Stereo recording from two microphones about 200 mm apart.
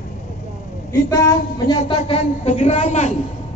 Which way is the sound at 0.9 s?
20° left (ahead or behind).